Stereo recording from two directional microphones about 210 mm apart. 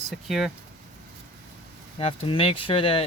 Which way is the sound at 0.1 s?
Centre (ahead or behind).